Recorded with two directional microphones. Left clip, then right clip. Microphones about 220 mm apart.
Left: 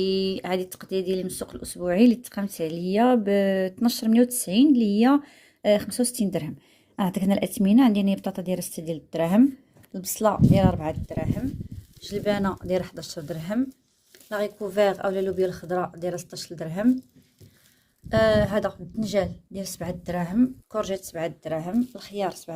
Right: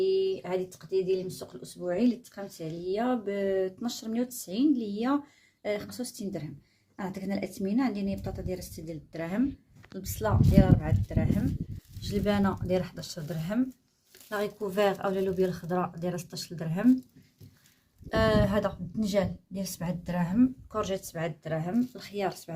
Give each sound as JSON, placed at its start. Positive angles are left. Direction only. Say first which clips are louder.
{"t": 0.0, "sound": "a woman's voice", "louder": "left 1 dB", "side_deg": 55}
{"t": 18.1, "sound": "a woman's voice", "louder": "left 5 dB", "side_deg": 25}